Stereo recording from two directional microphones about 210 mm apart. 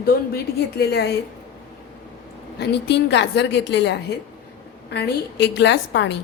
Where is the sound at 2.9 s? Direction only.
55° left (ahead or behind).